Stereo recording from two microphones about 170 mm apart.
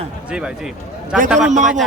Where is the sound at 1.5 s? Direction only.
45° right (ahead or behind).